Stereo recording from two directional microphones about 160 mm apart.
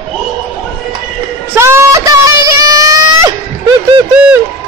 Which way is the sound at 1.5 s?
15° right (ahead or behind).